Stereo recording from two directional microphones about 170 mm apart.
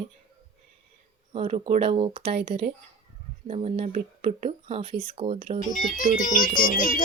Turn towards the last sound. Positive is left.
turn(degrees=55)  # may be behind; listen again after turning